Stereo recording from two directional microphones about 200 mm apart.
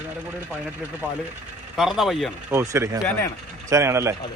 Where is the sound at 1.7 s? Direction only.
Centre (ahead or behind).